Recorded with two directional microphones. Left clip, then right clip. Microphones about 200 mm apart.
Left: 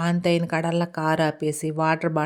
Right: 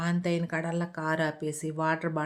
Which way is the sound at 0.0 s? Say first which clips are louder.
Left 8 dB; 40° left (ahead or behind).